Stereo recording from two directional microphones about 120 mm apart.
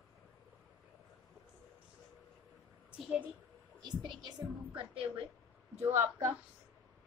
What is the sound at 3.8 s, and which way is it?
A woman's voice, 40° right (ahead or behind).